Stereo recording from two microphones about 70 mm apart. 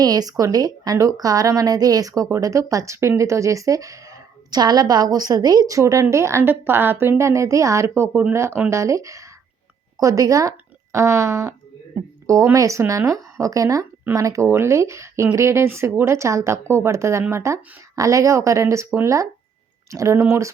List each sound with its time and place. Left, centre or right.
0.0 s a woman's voice: right
4.6 s a woman's voice: right
7.9 s a woman's voice: right
10.9 s a woman's voice: right
14.4 s a woman's voice: right